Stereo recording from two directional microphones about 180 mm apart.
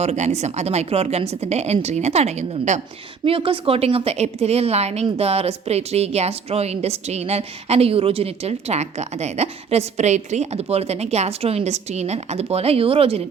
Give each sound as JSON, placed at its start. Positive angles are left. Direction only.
{"t": 0.0, "sound": "a woman's voice", "side_deg": -40}